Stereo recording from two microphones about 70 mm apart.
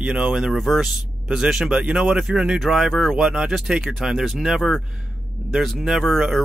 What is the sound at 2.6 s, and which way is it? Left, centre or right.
Speech, centre.